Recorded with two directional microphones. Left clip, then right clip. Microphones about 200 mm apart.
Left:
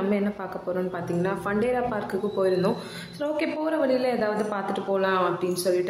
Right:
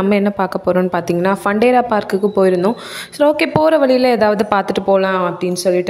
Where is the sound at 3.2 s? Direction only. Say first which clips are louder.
Right 14 dB; 50° right (ahead or behind).